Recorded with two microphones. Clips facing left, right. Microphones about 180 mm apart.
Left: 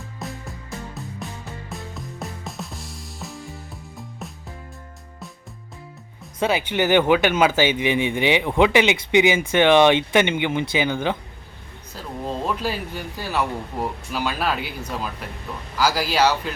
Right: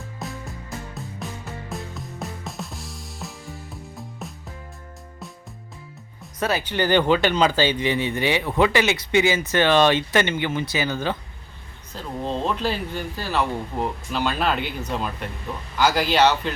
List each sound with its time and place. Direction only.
0.2 s music: centre (ahead or behind)
1.7 s music: centre (ahead or behind)
6.4 s a man's voice: 15° left (ahead or behind)